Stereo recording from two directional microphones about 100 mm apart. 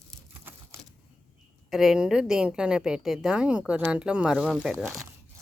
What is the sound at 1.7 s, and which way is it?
A woman's voice, 5° right (ahead or behind).